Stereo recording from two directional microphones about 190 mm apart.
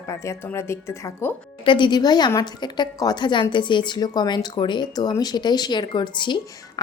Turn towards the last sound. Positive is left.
turn(degrees=25)  # may be behind; listen again after turning